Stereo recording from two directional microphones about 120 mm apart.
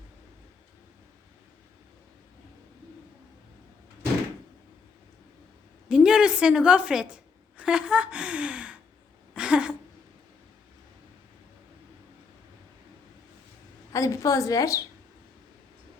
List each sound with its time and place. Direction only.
5.9 s a woman's voice: 5° right (ahead or behind)
9.3 s a sound: 10° right (ahead or behind)
13.9 s a woman's voice: 25° left (ahead or behind)